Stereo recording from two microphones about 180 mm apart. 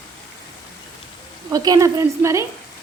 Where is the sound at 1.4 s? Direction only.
20° right (ahead or behind).